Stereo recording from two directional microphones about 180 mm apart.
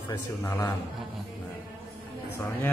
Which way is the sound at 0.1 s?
15° left (ahead or behind).